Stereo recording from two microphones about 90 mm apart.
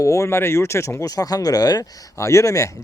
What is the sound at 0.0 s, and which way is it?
Speech, 35° left (ahead or behind).